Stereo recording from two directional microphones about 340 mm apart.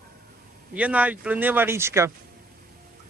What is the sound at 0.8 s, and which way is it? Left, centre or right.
Speech, centre.